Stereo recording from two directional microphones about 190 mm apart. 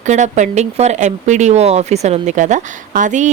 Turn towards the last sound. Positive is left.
turn(degrees=-40)  # may be behind; listen again after turning